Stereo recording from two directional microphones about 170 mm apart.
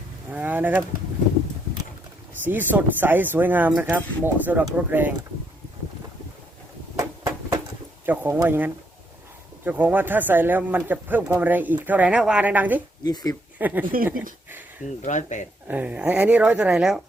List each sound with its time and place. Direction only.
0.3 s a sound: 10° right (ahead or behind)
2.4 s speech: 10° right (ahead or behind)
6.9 s a sound: 20° right (ahead or behind)
8.0 s speech: 10° right (ahead or behind)
14.8 s speech: 45° left (ahead or behind)
15.6 s speech: 10° right (ahead or behind)